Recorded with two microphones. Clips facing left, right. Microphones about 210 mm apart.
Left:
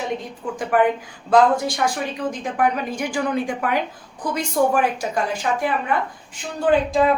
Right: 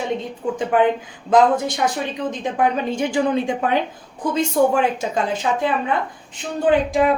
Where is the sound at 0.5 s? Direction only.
20° right (ahead or behind).